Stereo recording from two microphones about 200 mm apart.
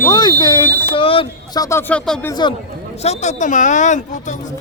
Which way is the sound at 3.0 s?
35° left (ahead or behind).